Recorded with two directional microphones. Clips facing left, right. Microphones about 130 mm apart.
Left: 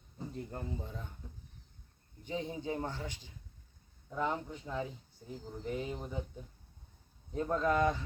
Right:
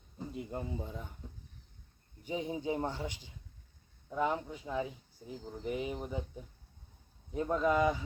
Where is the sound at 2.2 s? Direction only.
15° right (ahead or behind).